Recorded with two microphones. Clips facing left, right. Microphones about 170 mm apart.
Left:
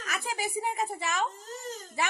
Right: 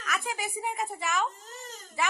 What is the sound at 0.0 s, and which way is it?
A woman's voice, 35° left (ahead or behind).